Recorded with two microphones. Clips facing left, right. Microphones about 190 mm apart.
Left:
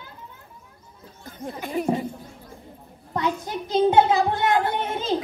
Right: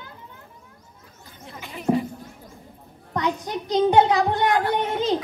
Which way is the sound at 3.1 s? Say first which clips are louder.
Right 1 dB; 20° right (ahead or behind).